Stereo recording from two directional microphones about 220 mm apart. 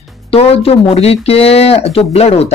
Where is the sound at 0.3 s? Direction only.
25° left (ahead or behind).